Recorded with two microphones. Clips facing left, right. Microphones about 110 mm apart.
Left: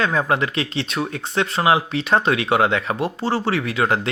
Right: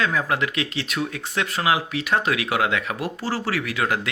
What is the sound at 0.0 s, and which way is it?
Speech, 30° left (ahead or behind).